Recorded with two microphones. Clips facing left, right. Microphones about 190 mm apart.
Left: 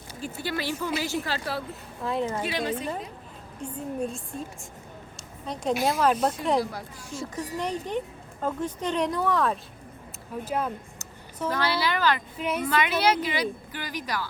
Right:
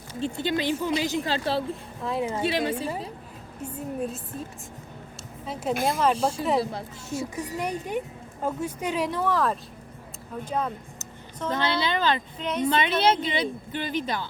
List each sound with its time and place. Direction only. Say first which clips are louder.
0.4 s speech: right 3 dB; 20° right (ahead or behind)
2.0 s a woman's voice: left 1 dB; centre (ahead or behind)
2.4 s speech: right 3 dB; 30° right (ahead or behind)
3.6 s a woman's voice: even; 5° right (ahead or behind)
5.5 s a woman's voice: left 1 dB; 5° right (ahead or behind)
6.1 s speech: even; 30° right (ahead or behind)
7.2 s a woman's voice: even; 10° right (ahead or behind); by 10.7 s 5° left (ahead or behind)
11.5 s speech: right 1 dB; 25° right (ahead or behind)
12.4 s speech: even; 5° left (ahead or behind)
12.6 s speech: right 2 dB; 25° right (ahead or behind)